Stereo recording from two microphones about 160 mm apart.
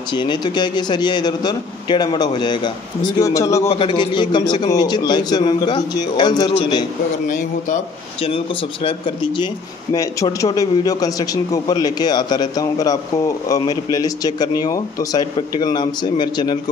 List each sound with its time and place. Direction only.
0.1 s a man's voice: 30° left (ahead or behind)
3.6 s a man's voice: 35° left (ahead or behind)
7.2 s a man's voice: 50° left (ahead or behind)
8.2 s a man's voice: 35° left (ahead or behind)